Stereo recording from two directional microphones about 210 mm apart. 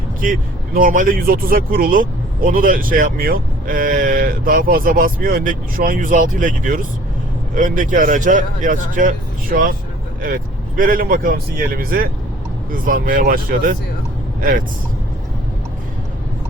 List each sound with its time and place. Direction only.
0.2 s speech: 40° right (ahead or behind)